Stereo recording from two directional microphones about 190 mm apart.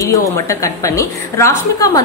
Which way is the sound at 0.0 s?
15° left (ahead or behind).